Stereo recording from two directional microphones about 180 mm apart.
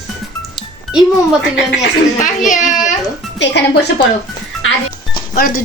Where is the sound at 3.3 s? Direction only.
80° left.